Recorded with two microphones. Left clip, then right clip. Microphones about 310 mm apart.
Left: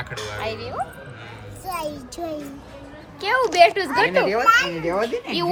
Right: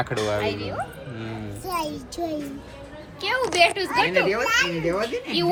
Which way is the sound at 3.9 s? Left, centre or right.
Left.